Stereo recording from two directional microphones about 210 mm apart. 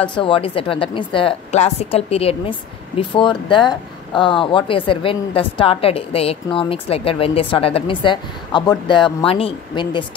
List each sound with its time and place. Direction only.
0.1 s speech: 25° left (ahead or behind)